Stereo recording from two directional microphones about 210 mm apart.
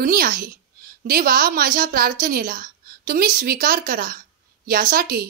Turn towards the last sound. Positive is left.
turn(degrees=-45)  # may be behind; listen again after turning